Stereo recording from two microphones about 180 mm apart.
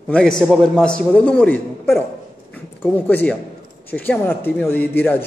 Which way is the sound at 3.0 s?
10° left (ahead or behind).